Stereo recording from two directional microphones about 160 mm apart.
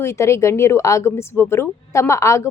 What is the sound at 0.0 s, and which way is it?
Speech, 15° left (ahead or behind).